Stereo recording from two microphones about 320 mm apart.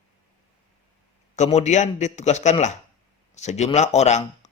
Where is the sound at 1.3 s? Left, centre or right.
Left.